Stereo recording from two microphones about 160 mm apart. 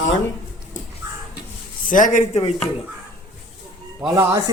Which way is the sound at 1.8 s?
55° left (ahead or behind).